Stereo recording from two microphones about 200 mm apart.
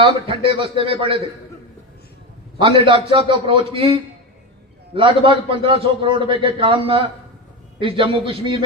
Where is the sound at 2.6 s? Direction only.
25° right (ahead or behind).